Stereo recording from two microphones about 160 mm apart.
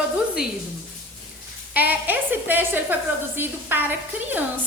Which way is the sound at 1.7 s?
10° right (ahead or behind).